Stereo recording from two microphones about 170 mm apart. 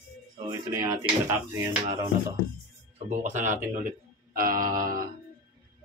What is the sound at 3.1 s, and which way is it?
Speech, 45° right (ahead or behind).